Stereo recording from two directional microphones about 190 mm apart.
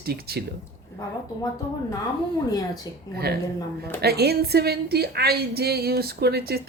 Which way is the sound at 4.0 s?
55° right (ahead or behind).